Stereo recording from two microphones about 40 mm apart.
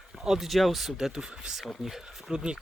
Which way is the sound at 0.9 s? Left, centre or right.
Centre.